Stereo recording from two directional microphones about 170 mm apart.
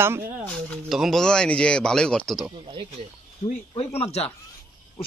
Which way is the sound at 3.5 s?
35° left (ahead or behind).